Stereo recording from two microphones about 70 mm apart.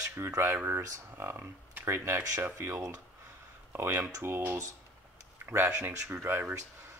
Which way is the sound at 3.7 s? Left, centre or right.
Right.